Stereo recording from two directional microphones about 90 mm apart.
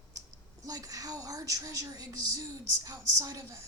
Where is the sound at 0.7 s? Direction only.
40° right (ahead or behind).